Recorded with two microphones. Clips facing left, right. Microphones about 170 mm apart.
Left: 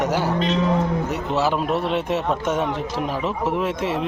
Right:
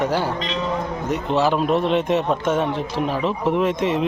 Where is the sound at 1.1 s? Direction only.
5° left (ahead or behind).